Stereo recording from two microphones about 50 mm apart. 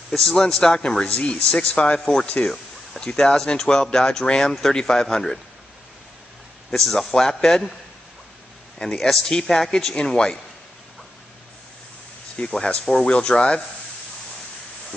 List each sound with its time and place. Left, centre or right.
0.1 s speech: centre
2.0 s speech: centre
2.2 s speech: left
6.7 s speech: centre
8.8 s speech: centre
12.4 s speech: centre